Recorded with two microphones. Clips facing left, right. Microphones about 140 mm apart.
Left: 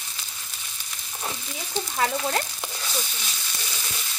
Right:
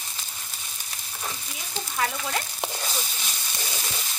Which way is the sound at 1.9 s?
35° left (ahead or behind).